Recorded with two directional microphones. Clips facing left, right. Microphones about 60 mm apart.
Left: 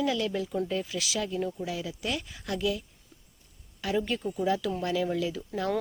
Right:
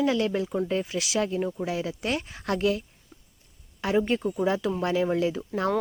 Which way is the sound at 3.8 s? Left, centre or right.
Right.